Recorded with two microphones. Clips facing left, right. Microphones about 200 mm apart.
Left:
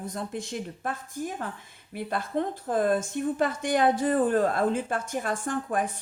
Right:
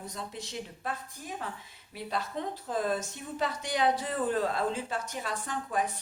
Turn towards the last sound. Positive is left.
turn(degrees=50)  # may be behind; listen again after turning